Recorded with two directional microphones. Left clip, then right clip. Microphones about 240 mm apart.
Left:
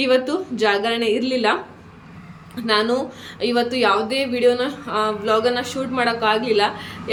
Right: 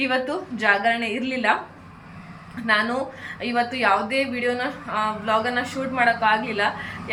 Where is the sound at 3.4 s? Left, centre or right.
Centre.